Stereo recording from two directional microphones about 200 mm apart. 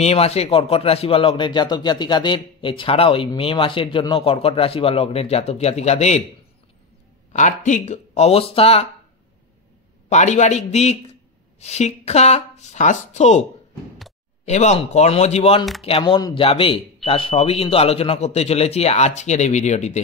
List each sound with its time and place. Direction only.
0.0 s speech: 30° left (ahead or behind)
7.3 s a man's voice: 35° left (ahead or behind)
10.0 s a man's voice: 35° left (ahead or behind)
14.4 s a man's voice: 35° left (ahead or behind)